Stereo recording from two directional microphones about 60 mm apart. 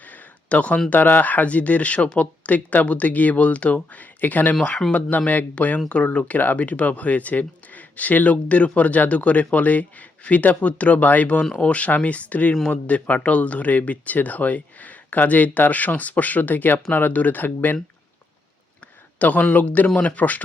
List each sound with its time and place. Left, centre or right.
0.1 s a sound: left
0.9 s speech: left
19.2 s speech: left